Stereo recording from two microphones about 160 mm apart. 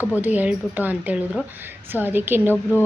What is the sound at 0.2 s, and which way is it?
A woman's voice, 10° right (ahead or behind).